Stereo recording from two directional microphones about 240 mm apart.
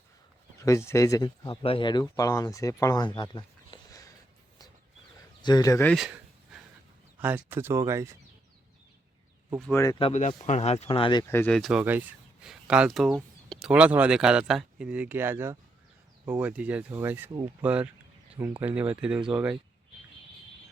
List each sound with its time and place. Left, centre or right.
0.6 s speech: centre
3.2 s a sound: centre
5.4 s a sound: centre
7.2 s speech: centre
9.6 s speech: centre
9.8 s speech: centre
10.1 s speech: left; by 19.2 s centre